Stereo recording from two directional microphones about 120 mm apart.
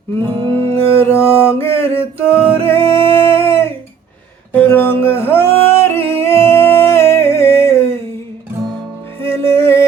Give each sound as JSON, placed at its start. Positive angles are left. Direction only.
{"t": 0.5, "sound": "music", "side_deg": 20}
{"t": 9.3, "sound": "music", "side_deg": 20}